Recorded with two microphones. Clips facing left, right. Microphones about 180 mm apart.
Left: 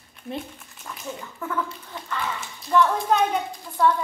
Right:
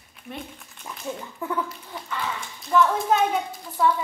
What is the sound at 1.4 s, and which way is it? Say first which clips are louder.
Speech: right 2 dB; 15° right (ahead or behind).